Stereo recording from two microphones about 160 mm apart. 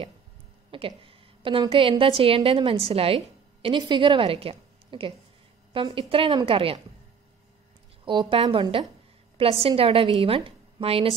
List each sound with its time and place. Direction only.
0.7 s a woman's voice: 35° right (ahead or behind)
8.0 s a woman's voice: 30° right (ahead or behind)